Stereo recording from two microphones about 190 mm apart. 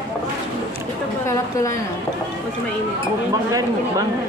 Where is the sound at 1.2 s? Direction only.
15° left (ahead or behind).